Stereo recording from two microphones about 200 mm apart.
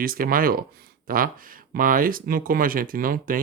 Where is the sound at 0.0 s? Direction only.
45° right (ahead or behind).